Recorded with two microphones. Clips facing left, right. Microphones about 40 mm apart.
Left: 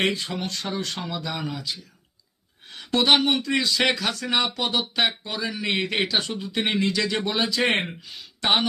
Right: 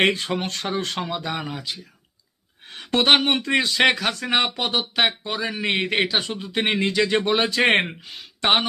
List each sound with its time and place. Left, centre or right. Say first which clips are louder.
0.0 s speech: right 4 dB; right
0.9 s speech: right 3 dB; right
1.5 s speech: right 1 dB; right
5.7 s speech: right 2 dB; right
6.4 s speech: right 2 dB; right
6.9 s speech: right 5 dB; right